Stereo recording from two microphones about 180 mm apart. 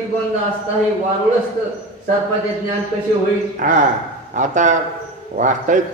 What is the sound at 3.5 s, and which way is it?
A man's voice, 45° right (ahead or behind).